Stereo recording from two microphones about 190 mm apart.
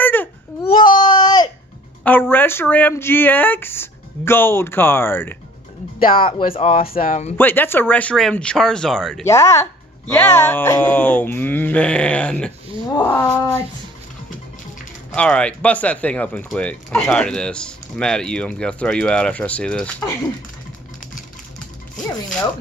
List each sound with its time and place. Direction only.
0.0 s baby cry: 10° left (ahead or behind)
0.7 s baby cry: 25° left (ahead or behind)
2.0 s speech: 10° left (ahead or behind)
5.9 s speech: 50° left (ahead or behind)
6.5 s speech: 35° left (ahead or behind)
6.8 s speech: 50° left (ahead or behind)
7.3 s speech: 10° left (ahead or behind)
9.2 s speech: 15° left (ahead or behind)
15.1 s speech: 5° left (ahead or behind)